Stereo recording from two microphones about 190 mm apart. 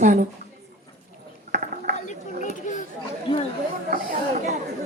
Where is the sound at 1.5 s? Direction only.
45° right (ahead or behind).